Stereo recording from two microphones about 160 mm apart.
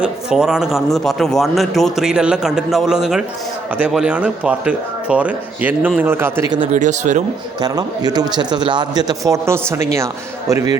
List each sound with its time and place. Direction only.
0.0 s a man's voice: 5° right (ahead or behind)
6.7 s speech: 50° right (ahead or behind)
7.6 s speech: 25° right (ahead or behind)